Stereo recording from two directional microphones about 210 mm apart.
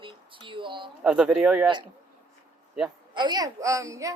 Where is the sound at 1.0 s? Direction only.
5° right (ahead or behind).